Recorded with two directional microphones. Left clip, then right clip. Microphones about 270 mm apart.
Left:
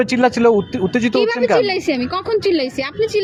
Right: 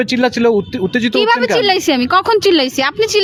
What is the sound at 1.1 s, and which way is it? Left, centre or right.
A woman's voice, right.